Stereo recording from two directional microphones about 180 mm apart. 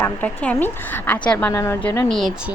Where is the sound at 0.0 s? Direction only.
10° left (ahead or behind).